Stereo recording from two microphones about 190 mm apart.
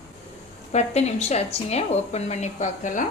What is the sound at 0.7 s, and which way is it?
Speech, 35° left (ahead or behind).